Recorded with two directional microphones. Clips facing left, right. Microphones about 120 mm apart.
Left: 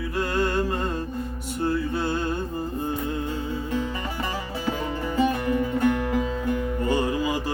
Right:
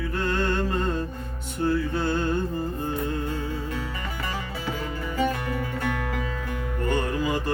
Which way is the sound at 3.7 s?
25° left (ahead or behind).